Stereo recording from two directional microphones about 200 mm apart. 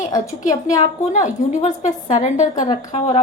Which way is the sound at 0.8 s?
35° left (ahead or behind).